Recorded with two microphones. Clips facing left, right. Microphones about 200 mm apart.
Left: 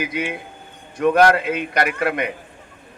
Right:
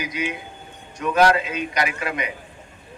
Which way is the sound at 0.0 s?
55° left (ahead or behind).